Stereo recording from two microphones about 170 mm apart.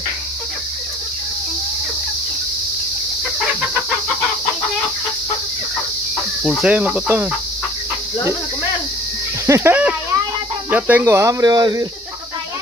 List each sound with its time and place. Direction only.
6.6 s speech: 5° right (ahead or behind)
9.5 s speech: 15° right (ahead or behind)